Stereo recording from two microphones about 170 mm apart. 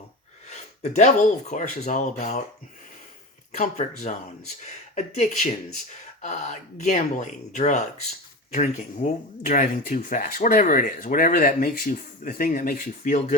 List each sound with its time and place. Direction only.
0.5 s speech: 40° left (ahead or behind)
3.5 s speech: 45° left (ahead or behind)